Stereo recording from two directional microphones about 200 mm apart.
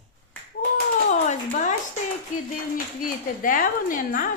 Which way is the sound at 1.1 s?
35° left (ahead or behind).